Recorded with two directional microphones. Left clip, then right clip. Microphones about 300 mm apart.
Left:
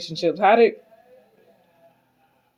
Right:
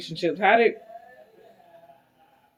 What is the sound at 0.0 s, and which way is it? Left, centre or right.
Speech, left.